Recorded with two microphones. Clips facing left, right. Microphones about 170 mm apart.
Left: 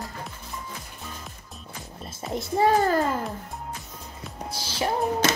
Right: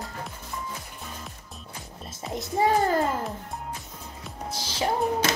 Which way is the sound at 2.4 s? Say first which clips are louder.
Left 2 dB; 20° right (ahead or behind).